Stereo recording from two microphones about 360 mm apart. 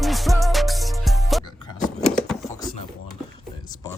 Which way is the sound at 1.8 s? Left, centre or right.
Centre.